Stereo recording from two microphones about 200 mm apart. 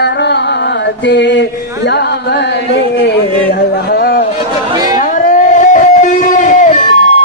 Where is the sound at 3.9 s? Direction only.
50° left (ahead or behind).